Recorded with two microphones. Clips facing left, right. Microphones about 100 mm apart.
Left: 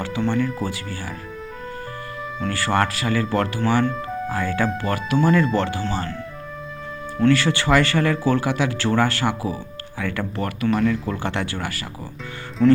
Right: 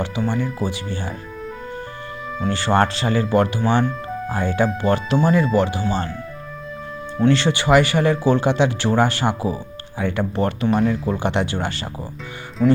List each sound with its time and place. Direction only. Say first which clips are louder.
0.2 s speech: left 2 dB; 10° right (ahead or behind)
2.5 s speech: right 3 dB; 25° right (ahead or behind)
7.2 s speech: right 1 dB; 20° right (ahead or behind)
11.1 s speech: right 4 dB; 20° right (ahead or behind)
12.6 s speech: left 1 dB; 5° right (ahead or behind)